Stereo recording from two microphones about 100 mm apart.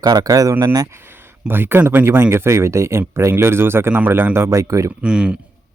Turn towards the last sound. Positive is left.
turn(degrees=-10)  # may be behind; listen again after turning